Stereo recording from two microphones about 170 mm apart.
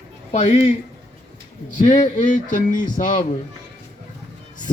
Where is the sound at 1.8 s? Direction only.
50° left (ahead or behind).